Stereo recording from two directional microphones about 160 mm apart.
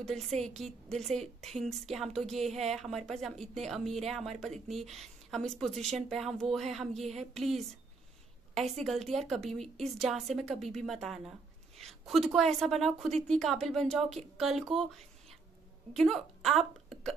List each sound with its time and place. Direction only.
0.0 s a woman's voice: centre (ahead or behind)
1.4 s a woman's voice: centre (ahead or behind)
8.7 s a woman's voice: 5° left (ahead or behind)
15.9 s speech: centre (ahead or behind)